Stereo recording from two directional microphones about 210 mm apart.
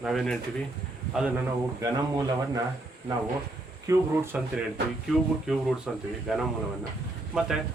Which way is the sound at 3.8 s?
10° right (ahead or behind).